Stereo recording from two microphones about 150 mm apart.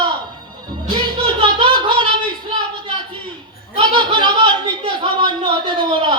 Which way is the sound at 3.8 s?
30° right (ahead or behind).